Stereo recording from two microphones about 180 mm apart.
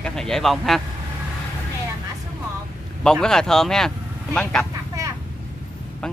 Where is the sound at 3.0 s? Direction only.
5° left (ahead or behind).